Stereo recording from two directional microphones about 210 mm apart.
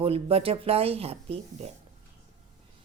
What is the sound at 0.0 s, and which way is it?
Speech, 25° right (ahead or behind).